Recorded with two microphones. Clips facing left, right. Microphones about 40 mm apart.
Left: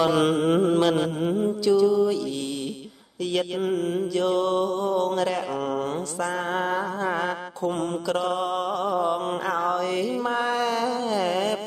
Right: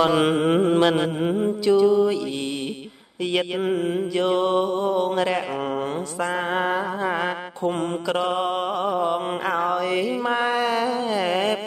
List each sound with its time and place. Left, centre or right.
0.0 s mantra: right
3.3 s mantra: right